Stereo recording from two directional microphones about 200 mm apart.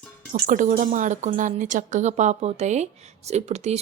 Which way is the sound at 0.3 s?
40° right (ahead or behind).